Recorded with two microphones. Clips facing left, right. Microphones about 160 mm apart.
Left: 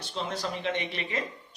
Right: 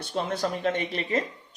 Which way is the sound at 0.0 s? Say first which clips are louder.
Right 5 dB; 50° right (ahead or behind).